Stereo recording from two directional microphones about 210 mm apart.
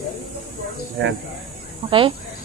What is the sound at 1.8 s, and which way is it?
Speech, 25° right (ahead or behind).